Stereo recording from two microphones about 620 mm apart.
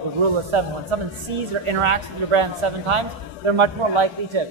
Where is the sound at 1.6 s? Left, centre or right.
Right.